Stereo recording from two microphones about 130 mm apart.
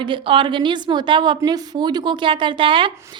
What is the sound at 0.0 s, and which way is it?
Speech, 40° right (ahead or behind).